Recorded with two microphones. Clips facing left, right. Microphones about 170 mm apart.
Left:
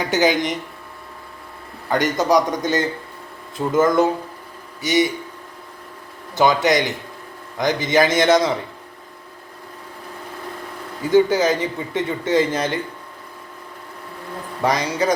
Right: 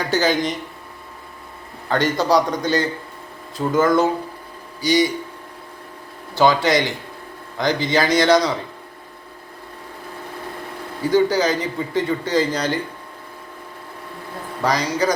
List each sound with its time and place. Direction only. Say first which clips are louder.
0.1 s a man's voice: left 1 dB; 20° left (ahead or behind)
1.9 s a man's voice: even; 20° left (ahead or behind)
6.3 s a man's voice: even; 20° left (ahead or behind)
11.1 s a man's voice: left 2 dB; 25° left (ahead or behind)
14.6 s a man's voice: even; 25° left (ahead or behind)